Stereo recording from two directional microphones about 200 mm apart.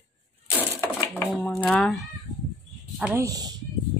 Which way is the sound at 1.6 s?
5° left (ahead or behind).